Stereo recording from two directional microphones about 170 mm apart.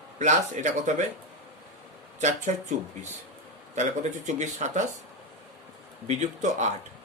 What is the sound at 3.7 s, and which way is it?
Speech, 45° right (ahead or behind).